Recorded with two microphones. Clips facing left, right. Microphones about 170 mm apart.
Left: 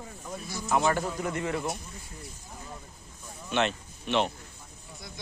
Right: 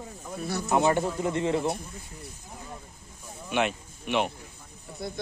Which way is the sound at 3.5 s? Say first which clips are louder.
Right 1 dB; 10° right (ahead or behind).